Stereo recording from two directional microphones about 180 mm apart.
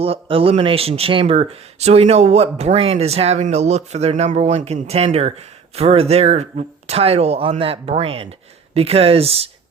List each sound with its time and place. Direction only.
0.0 s speech: 30° right (ahead or behind)